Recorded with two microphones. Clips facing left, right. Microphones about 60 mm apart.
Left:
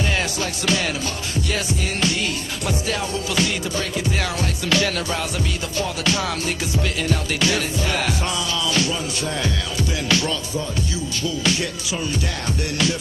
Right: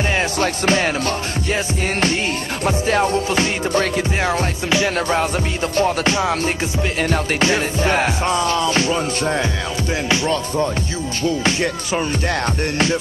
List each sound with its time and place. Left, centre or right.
0.4 s music: right
2.6 s music: right
4.6 s music: centre
5.8 s music: right
6.1 s music: right
10.0 s music: right
11.2 s music: right